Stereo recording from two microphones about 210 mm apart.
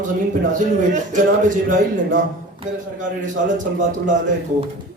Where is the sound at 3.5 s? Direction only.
40° right (ahead or behind).